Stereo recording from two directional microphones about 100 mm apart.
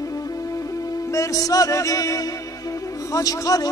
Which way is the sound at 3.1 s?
35° left (ahead or behind).